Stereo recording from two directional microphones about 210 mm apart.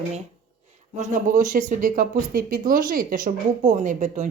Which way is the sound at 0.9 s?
35° right (ahead or behind).